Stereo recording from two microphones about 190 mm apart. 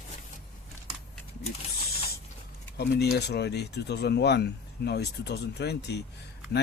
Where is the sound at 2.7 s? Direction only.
55° left (ahead or behind).